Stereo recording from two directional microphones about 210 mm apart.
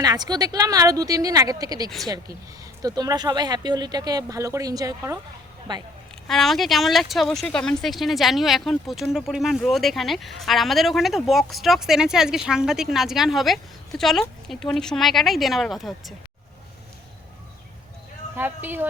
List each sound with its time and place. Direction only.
0.0 s a woman's voice: 20° right (ahead or behind)
6.2 s speech: centre (ahead or behind)
18.3 s speech: 10° right (ahead or behind)